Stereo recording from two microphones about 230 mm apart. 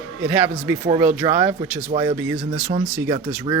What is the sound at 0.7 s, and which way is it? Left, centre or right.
Speech, centre.